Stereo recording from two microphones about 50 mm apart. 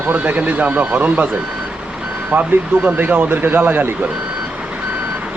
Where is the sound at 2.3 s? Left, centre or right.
Right.